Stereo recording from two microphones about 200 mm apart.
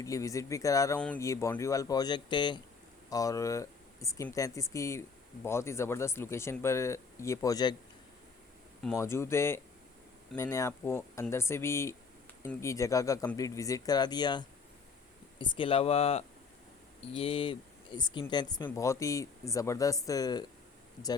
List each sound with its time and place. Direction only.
0.0 s speech: 15° left (ahead or behind)
9.0 s speech: 15° left (ahead or behind)